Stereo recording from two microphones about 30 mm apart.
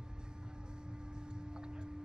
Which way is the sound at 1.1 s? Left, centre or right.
Right.